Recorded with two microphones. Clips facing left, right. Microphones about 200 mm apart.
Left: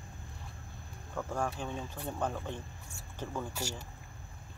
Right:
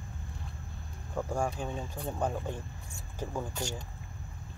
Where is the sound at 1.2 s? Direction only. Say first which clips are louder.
Right 3 dB; 15° right (ahead or behind).